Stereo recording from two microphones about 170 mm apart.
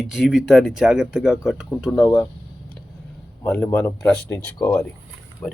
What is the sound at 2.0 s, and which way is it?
Speech, 15° left (ahead or behind).